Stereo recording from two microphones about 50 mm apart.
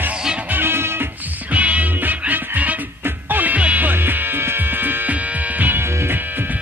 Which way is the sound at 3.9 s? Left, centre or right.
Right.